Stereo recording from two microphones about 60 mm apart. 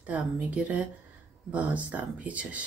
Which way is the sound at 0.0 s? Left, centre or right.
Right.